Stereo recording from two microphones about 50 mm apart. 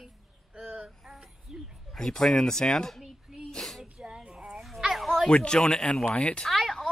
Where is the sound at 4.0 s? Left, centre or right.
Centre.